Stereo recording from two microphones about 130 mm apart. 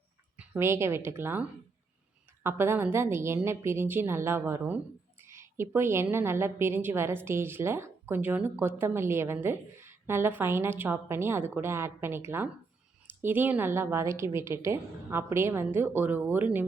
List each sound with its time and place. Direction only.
0.3 s a woman's voice: 15° right (ahead or behind)